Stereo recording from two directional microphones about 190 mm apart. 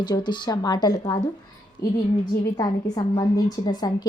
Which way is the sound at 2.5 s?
20° left (ahead or behind).